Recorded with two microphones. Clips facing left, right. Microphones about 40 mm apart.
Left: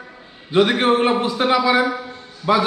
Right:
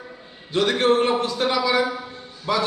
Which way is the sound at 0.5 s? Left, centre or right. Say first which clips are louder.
Left 3 dB; left.